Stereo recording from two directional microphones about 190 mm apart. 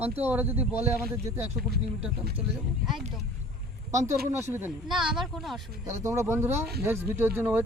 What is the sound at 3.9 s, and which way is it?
Speech, 15° right (ahead or behind).